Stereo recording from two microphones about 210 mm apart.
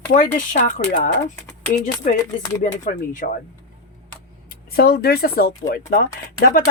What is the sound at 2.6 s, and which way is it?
Speech, 40° left (ahead or behind).